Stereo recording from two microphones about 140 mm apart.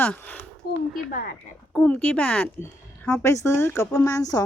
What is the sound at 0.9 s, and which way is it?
Speech, 90° left.